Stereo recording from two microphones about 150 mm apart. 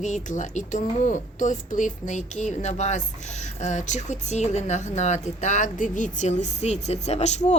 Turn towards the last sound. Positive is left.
turn(degrees=50)  # may be behind; listen again after turning